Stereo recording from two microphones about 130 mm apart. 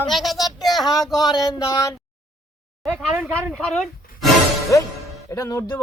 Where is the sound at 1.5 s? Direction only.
25° left (ahead or behind).